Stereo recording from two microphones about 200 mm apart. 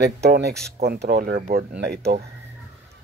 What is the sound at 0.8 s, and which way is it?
Speech, 55° right (ahead or behind).